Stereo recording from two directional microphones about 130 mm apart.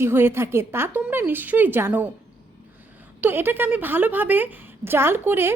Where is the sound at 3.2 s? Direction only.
15° right (ahead or behind).